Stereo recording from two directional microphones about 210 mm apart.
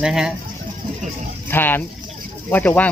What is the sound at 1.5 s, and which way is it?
Speech, 10° left (ahead or behind).